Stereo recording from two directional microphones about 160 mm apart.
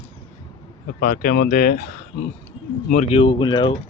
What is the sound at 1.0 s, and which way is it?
Speech, 65° left (ahead or behind).